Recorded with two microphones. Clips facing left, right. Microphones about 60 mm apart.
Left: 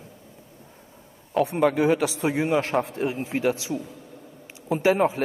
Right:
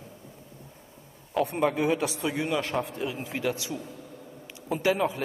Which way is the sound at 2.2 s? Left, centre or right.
Left.